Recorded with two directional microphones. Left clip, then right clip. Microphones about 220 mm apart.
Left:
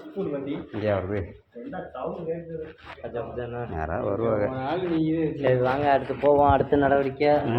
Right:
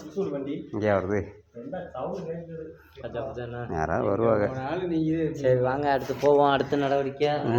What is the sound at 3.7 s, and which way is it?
Speech, 50° right (ahead or behind).